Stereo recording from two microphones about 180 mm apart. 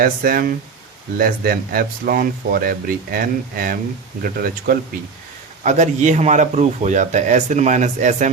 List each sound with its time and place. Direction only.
0.0 s speech: 55° right (ahead or behind)
5.6 s a man's voice: 40° right (ahead or behind)